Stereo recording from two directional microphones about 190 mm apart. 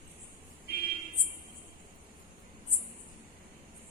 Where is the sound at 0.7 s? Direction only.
55° left (ahead or behind).